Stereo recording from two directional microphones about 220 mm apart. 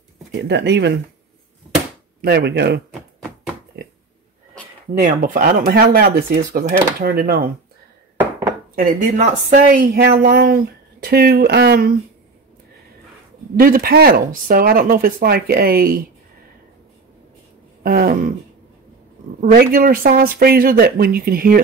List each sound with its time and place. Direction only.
0.5 s speech: 50° right (ahead or behind)
2.2 s speech: 50° right (ahead or behind)
3.8 s a sound: 45° right (ahead or behind)
4.9 s speech: 35° right (ahead or behind)
8.7 s speech: 40° right (ahead or behind)
13.6 s speech: 40° right (ahead or behind)
17.8 s speech: 40° right (ahead or behind)
19.4 s speech: 45° right (ahead or behind)